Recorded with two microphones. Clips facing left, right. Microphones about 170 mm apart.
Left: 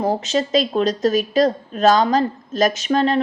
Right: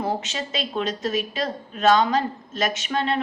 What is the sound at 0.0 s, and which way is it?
A woman's voice, 35° left (ahead or behind).